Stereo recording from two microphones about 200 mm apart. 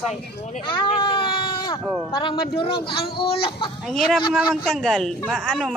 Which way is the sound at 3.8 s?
Centre (ahead or behind).